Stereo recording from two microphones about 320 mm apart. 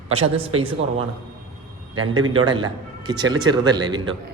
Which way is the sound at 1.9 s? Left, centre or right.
Centre.